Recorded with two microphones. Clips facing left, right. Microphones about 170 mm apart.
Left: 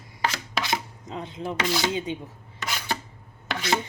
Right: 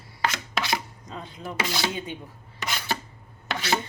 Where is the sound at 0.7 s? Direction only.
20° left (ahead or behind).